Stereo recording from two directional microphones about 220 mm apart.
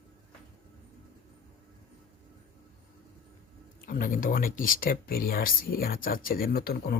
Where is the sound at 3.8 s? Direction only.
40° left (ahead or behind).